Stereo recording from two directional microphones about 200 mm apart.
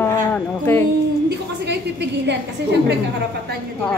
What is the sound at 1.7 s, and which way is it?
Speech, 60° right (ahead or behind).